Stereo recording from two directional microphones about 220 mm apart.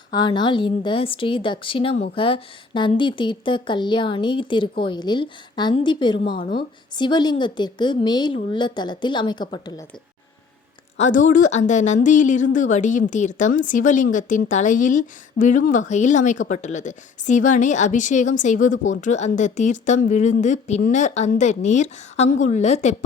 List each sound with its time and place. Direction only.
0.1 s speech: 20° left (ahead or behind)
6.4 s a woman's voice: 40° left (ahead or behind)
6.9 s speech: 20° left (ahead or behind)
10.9 s a woman's voice: 35° left (ahead or behind)